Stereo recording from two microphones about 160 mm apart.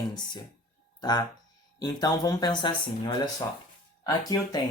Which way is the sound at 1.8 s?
25° left (ahead or behind).